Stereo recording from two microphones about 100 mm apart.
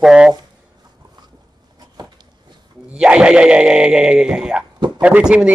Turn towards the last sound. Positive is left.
turn(degrees=-10)  # may be behind; listen again after turning